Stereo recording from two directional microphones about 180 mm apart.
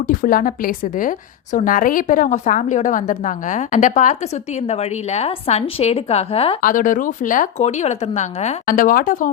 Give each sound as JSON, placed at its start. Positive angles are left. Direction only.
{"t": 0.1, "sound": "a woman's voice", "side_deg": 50}
{"t": 6.6, "sound": "speech", "side_deg": 50}